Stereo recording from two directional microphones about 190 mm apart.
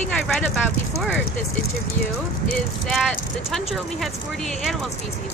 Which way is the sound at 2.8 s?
5° left (ahead or behind).